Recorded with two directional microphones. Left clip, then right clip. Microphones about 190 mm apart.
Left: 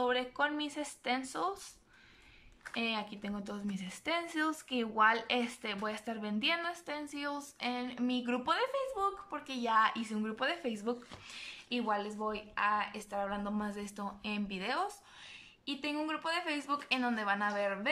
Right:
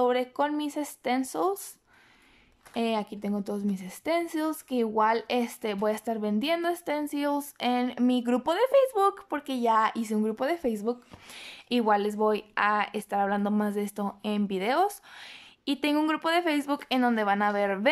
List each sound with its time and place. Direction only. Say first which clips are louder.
0.0 s speech: right 7 dB; 30° right (ahead or behind)
2.7 s speech: right 7 dB; 35° right (ahead or behind)
11.3 s speech: right 9 dB; 45° right (ahead or behind)